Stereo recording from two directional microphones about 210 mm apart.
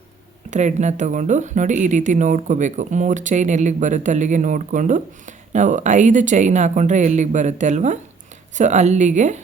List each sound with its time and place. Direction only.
0.5 s speech: 35° right (ahead or behind)